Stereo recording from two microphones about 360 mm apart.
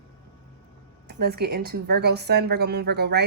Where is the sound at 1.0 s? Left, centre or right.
Right.